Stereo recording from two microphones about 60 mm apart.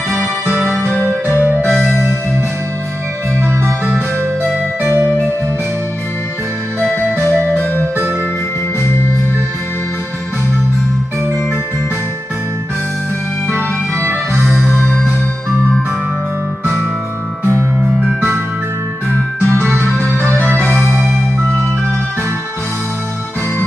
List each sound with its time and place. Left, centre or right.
0.7 s music: centre
1.0 s music: right
13.5 s music: right
19.4 s music: left
20.4 s music: right